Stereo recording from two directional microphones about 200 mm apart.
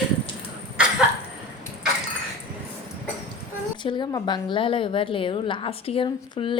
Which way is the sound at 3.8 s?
25° left (ahead or behind).